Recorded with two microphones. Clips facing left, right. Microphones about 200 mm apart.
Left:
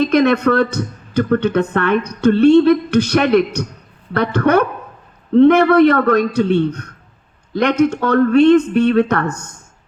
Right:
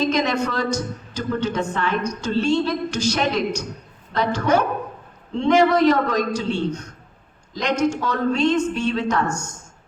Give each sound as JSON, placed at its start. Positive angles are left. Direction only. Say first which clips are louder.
{"t": 0.0, "sound": "speech", "louder": "left 8 dB", "side_deg": 60}